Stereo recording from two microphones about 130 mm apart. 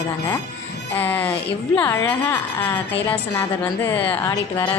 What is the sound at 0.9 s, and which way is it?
A woman's voice, 15° left (ahead or behind).